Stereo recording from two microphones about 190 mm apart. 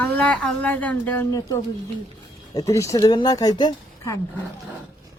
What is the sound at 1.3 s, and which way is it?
Speech, 20° left (ahead or behind).